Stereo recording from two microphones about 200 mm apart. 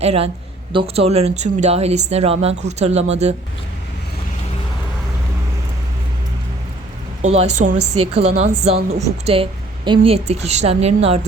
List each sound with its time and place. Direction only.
0.0 s a woman's voice: 30° right (ahead or behind)
7.2 s a woman's voice: 30° right (ahead or behind)